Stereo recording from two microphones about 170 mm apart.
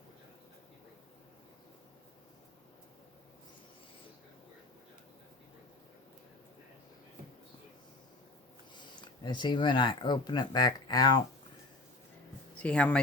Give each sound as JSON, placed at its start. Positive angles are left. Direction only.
{"t": 8.7, "sound": "speech", "side_deg": 25}
{"t": 12.6, "sound": "speech", "side_deg": 5}